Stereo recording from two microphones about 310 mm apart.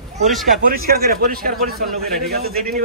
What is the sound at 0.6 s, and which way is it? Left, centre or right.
Speech, right.